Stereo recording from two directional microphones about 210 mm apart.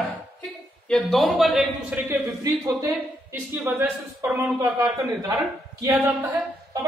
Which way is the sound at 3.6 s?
10° right (ahead or behind).